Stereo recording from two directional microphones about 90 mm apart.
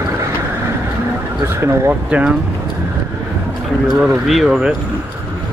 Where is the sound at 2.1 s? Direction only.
10° right (ahead or behind).